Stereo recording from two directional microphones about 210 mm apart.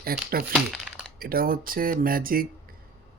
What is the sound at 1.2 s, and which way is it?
Speech, 45° right (ahead or behind).